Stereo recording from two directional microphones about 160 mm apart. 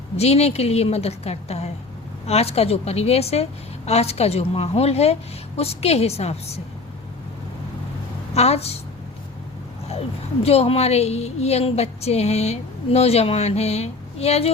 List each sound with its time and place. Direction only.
0.2 s a woman's voice: 40° left (ahead or behind)
8.3 s a woman's voice: 40° left (ahead or behind)
10.4 s a woman's voice: 40° left (ahead or behind)